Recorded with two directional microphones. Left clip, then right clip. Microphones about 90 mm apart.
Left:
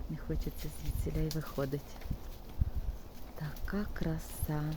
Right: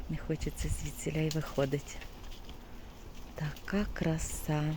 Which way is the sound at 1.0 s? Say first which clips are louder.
Right 4 dB; 25° right (ahead or behind).